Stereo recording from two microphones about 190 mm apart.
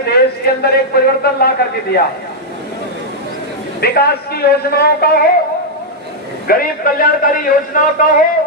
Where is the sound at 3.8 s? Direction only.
55° left (ahead or behind).